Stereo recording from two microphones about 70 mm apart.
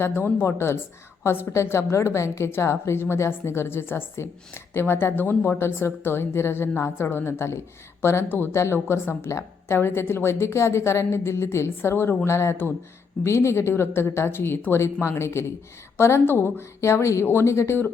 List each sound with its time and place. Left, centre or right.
0.0 s a woman's voice: left